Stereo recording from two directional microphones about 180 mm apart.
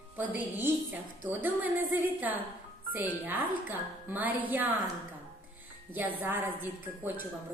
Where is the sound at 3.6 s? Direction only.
10° right (ahead or behind).